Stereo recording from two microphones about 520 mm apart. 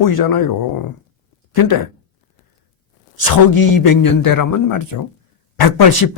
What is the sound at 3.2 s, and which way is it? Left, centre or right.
A man's voice, left.